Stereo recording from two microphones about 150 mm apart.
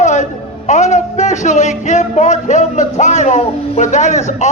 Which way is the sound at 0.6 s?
50° left (ahead or behind).